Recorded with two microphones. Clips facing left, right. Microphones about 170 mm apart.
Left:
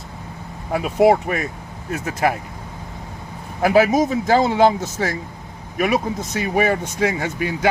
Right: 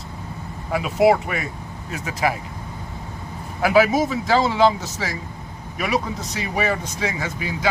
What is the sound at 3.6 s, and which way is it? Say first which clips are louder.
Speech: left 2 dB; 45° left (ahead or behind).